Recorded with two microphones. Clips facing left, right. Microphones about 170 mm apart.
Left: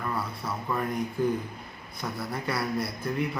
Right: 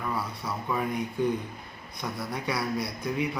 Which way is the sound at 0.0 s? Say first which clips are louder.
Even; centre (ahead or behind).